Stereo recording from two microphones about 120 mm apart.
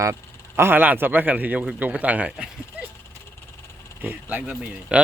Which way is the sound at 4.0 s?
15° right (ahead or behind).